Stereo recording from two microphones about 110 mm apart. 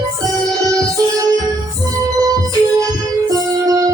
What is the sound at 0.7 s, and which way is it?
Music, 30° right (ahead or behind).